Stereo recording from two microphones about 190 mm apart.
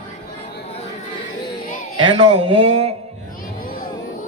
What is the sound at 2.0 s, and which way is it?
Speech, 30° right (ahead or behind).